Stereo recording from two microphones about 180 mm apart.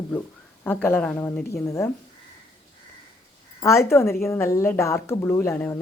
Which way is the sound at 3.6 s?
15° left (ahead or behind).